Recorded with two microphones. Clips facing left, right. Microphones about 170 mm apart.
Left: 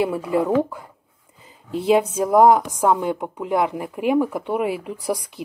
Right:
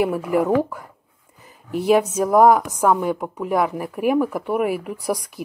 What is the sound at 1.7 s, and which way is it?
Speech, 25° left (ahead or behind).